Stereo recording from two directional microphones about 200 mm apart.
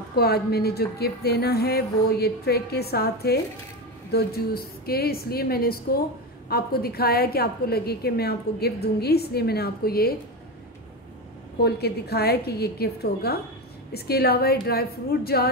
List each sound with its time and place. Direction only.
0.1 s a woman's voice: 50° left (ahead or behind)
11.6 s a woman's voice: 55° left (ahead or behind)